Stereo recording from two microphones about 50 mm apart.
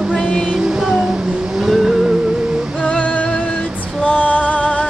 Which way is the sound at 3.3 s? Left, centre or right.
Centre.